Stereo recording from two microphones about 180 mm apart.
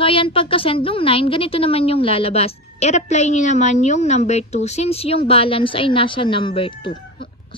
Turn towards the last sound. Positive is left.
turn(degrees=30)  # may be behind; listen again after turning